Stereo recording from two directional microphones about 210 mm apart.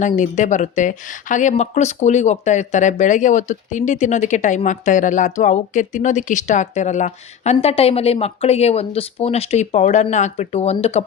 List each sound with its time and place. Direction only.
0.0 s speech: 35° left (ahead or behind)